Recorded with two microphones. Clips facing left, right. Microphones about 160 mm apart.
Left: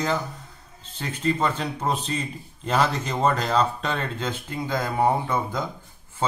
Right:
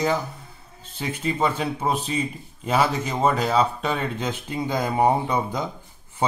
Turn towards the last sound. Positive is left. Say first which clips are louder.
# right 2 dB
turn(degrees=-15)  # may be behind; listen again after turning